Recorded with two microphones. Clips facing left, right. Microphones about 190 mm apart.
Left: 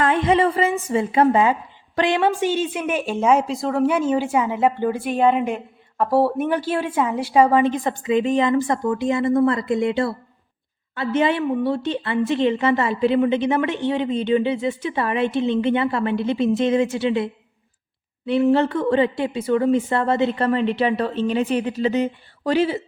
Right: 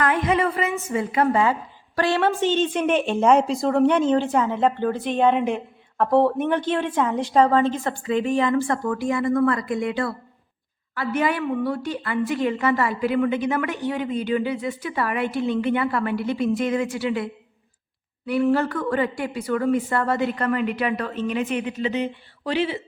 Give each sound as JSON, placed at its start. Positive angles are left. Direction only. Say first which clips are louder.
{"t": 0.0, "sound": "a woman's voice", "louder": "left 3 dB", "side_deg": 25}
{"t": 18.3, "sound": "a woman's voice", "louder": "left 3 dB", "side_deg": 25}